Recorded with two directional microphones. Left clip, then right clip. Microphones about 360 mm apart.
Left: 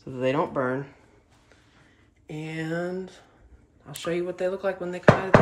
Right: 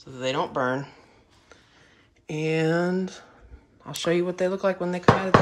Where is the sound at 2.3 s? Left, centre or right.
Centre.